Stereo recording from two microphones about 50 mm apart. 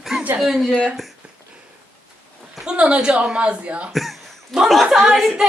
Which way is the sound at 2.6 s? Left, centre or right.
Centre.